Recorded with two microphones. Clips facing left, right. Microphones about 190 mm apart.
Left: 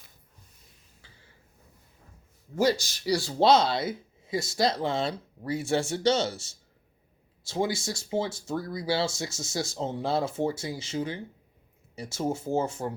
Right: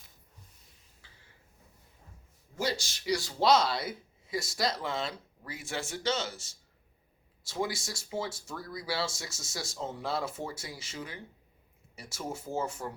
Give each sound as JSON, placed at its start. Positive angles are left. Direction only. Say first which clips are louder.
{"t": 2.6, "sound": "speech", "louder": "left 9 dB", "side_deg": 40}